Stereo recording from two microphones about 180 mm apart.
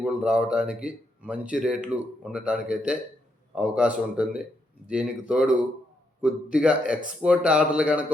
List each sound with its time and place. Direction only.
0.0 s a man's voice: 5° right (ahead or behind)